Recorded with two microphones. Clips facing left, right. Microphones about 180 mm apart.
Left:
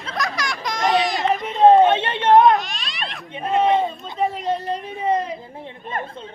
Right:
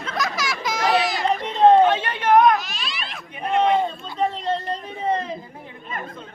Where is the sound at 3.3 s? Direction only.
25° left (ahead or behind).